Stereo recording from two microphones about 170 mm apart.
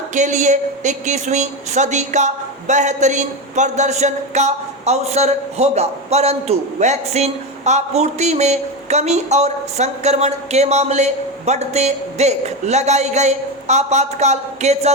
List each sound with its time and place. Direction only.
0.1 s a woman's voice: 45° right (ahead or behind)